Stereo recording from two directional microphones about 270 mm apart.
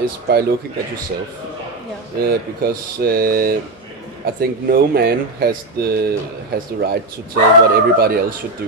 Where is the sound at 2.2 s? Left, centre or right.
Right.